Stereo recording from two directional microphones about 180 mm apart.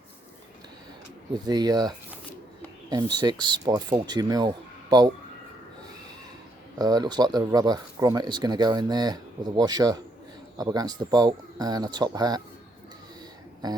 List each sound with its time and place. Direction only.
1.5 s speech: 20° right (ahead or behind)
6.7 s speech: 20° right (ahead or behind)
13.6 s speech: 20° right (ahead or behind)